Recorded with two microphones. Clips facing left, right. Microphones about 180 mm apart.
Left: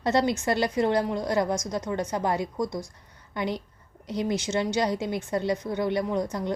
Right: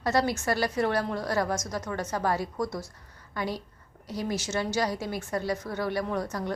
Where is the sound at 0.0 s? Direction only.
20° left (ahead or behind).